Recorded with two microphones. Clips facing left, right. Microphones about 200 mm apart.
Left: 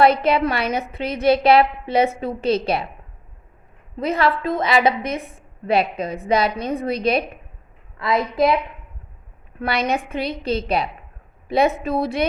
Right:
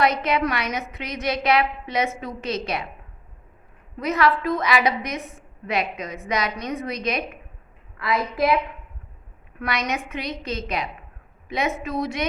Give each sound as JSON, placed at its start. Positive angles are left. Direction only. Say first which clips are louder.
{"t": 0.0, "sound": "a woman's voice", "louder": "left 5 dB", "side_deg": 30}
{"t": 3.9, "sound": "a woman's voice", "louder": "left 1 dB", "side_deg": 30}
{"t": 9.6, "sound": "a woman's voice", "louder": "left 5 dB", "side_deg": 30}